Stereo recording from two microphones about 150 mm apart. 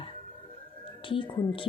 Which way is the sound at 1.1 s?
35° left (ahead or behind).